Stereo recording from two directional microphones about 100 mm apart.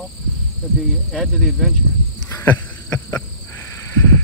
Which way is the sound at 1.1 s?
5° left (ahead or behind).